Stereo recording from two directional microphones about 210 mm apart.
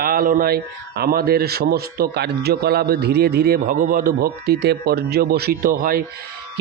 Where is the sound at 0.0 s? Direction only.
45° right (ahead or behind).